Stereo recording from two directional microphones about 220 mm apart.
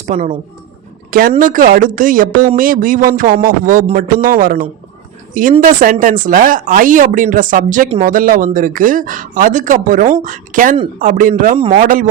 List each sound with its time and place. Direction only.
0.0 s a woman's voice: 35° right (ahead or behind)